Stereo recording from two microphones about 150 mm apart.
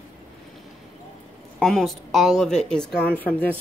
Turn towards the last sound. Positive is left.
turn(degrees=10)  # may be behind; listen again after turning